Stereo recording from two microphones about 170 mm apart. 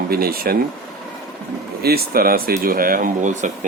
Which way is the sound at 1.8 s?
65° right (ahead or behind).